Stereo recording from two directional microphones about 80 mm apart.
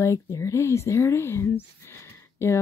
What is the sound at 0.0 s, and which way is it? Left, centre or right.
Speech, left.